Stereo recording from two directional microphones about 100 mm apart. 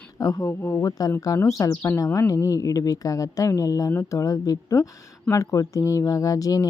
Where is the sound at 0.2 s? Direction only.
35° left (ahead or behind).